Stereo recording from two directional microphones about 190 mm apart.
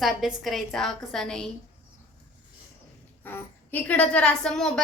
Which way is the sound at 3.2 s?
10° left (ahead or behind).